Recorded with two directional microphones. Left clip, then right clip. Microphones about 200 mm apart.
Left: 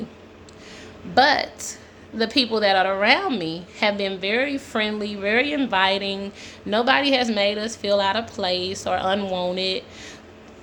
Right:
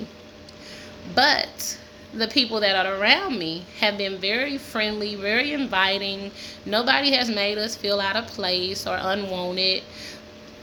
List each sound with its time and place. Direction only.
1.1 s a woman's voice: 15° left (ahead or behind)